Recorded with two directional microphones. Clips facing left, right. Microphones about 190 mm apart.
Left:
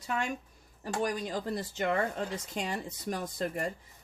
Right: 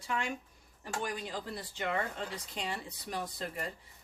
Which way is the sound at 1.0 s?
40° left (ahead or behind).